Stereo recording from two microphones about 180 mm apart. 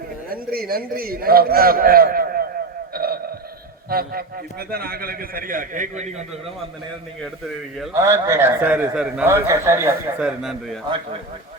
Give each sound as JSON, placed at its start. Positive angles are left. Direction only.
{"t": 0.3, "sound": "a man's voice", "side_deg": -55}
{"t": 2.9, "sound": "a sound", "side_deg": -55}
{"t": 3.8, "sound": "a man's voice", "side_deg": -55}
{"t": 7.9, "sound": "a man's voice", "side_deg": -15}